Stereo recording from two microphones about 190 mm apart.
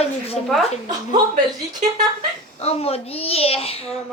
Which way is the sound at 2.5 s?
35° left (ahead or behind).